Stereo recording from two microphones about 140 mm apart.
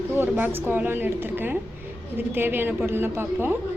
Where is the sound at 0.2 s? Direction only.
15° right (ahead or behind).